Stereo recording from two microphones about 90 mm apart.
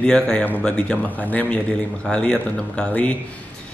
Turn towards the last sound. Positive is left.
turn(degrees=15)  # may be behind; listen again after turning